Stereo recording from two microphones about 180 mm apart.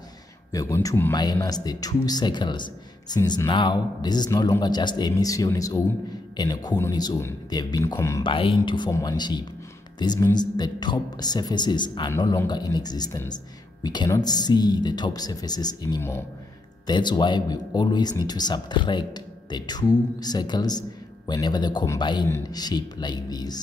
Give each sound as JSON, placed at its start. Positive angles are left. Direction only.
{"t": 0.5, "sound": "speech", "side_deg": 20}
{"t": 8.2, "sound": "speech", "side_deg": 30}